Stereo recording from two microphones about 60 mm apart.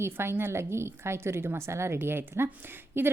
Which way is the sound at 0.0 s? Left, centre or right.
Right.